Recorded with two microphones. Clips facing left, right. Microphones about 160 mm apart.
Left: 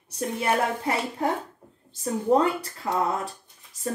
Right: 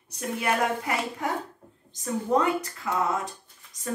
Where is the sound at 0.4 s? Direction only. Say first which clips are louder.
Left 1 dB; 30° left (ahead or behind).